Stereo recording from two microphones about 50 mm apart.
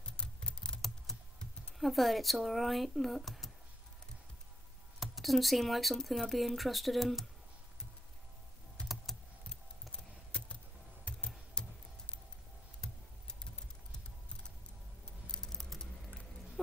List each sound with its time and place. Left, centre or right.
0.2 s typing: centre
1.1 s computer keyboard: centre
1.8 s speech: centre
5.0 s speech: centre
9.1 s typing: centre
9.5 s typing: centre
11.1 s computer keyboard: centre
12.8 s typing: centre
15.2 s typing: centre